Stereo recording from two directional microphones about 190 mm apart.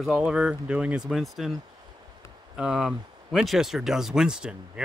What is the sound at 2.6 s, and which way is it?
Speech, centre (ahead or behind).